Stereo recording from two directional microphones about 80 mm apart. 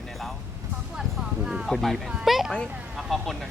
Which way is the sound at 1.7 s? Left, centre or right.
Centre.